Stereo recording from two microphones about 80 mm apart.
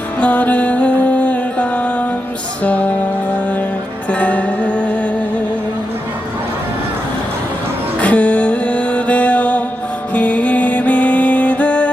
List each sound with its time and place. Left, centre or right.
0.2 s music: centre
4.2 s music: centre
8.0 s music: centre